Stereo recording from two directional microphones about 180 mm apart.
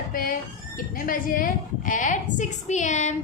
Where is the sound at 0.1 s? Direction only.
50° left (ahead or behind).